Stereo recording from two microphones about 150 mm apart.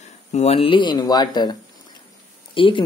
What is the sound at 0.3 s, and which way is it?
Speech, 45° left (ahead or behind).